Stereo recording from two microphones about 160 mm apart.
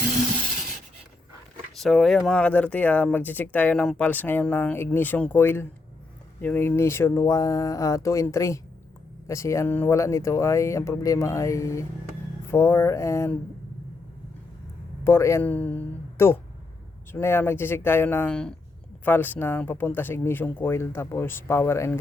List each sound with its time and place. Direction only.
1.7 s speech: centre (ahead or behind); by 13.3 s 15° left (ahead or behind)
15.0 s speech: 15° left (ahead or behind)